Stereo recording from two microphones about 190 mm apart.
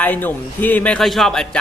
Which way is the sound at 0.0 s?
10° left (ahead or behind).